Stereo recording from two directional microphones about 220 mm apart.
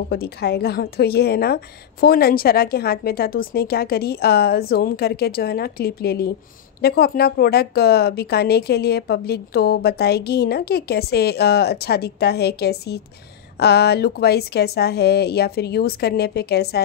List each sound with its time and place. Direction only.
0.1 s a woman's voice: 45° left (ahead or behind)